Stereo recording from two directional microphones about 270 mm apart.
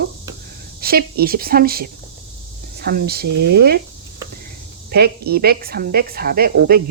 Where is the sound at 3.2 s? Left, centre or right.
Right.